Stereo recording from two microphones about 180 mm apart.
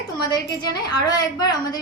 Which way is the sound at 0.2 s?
25° left (ahead or behind).